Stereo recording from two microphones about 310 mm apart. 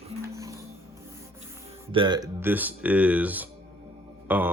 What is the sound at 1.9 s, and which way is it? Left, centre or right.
Speech, centre.